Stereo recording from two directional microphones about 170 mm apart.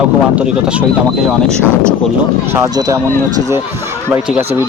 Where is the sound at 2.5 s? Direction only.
20° right (ahead or behind).